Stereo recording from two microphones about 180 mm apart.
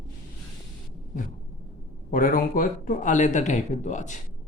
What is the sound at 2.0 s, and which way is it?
Speech, 50° left (ahead or behind).